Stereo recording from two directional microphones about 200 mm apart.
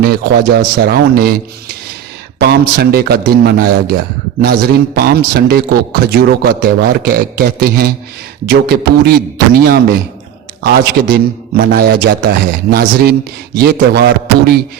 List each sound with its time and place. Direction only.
0.0 s a man's voice: 50° right (ahead or behind)
13.6 s a man's voice: 55° right (ahead or behind)